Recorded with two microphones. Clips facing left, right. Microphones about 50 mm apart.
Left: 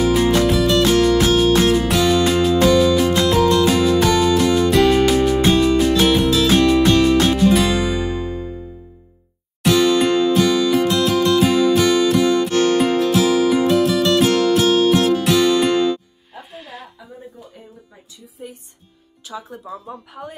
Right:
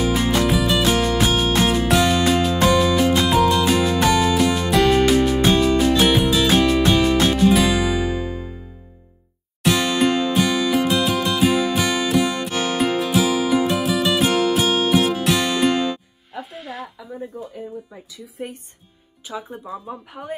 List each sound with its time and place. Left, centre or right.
0.0 s music: centre
16.5 s a sound: centre
18.4 s music: right
19.2 s speech: centre